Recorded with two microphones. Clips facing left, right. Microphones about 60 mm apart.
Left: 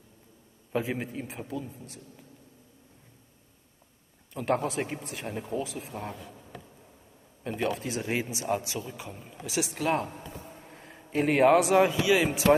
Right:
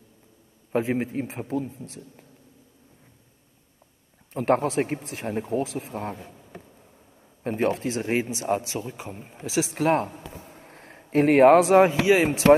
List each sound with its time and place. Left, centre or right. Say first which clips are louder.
0.7 s a man's voice: right 6 dB; right
4.3 s speech: right 6 dB; right
5.5 s speech: right 6 dB; right
5.9 s a man's voice: right 5 dB; right
10.7 s a sound: right 8 dB; right
11.7 s speech: right 5 dB; right